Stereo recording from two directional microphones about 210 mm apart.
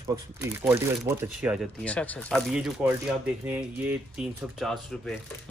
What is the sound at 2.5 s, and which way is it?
Speech, 5° right (ahead or behind).